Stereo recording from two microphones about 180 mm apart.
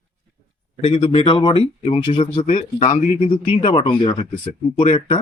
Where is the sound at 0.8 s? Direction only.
35° left (ahead or behind).